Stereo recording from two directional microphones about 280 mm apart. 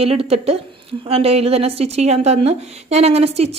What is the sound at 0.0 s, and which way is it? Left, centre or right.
A woman's voice, right.